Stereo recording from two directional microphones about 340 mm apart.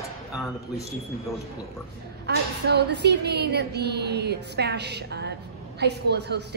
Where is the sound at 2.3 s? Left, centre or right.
Right.